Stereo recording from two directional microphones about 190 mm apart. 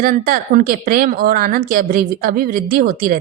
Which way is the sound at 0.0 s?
45° right (ahead or behind).